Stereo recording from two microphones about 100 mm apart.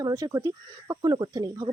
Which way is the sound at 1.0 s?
45° right (ahead or behind).